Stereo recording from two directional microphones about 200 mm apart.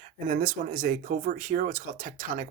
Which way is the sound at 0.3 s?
40° right (ahead or behind).